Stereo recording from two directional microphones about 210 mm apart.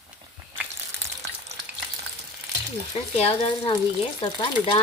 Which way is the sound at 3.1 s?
25° left (ahead or behind).